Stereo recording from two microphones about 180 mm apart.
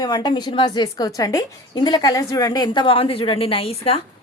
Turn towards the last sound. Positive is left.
turn(degrees=35)  # may be behind; listen again after turning